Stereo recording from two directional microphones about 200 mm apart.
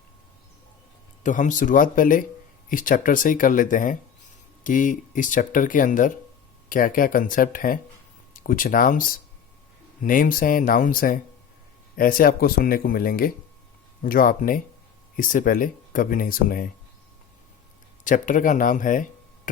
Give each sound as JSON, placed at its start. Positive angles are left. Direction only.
{"t": 1.2, "sound": "speech", "side_deg": 40}
{"t": 18.0, "sound": "speech", "side_deg": 40}